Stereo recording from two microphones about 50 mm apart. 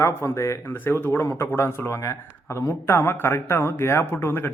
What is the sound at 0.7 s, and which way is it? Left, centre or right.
Speech, left.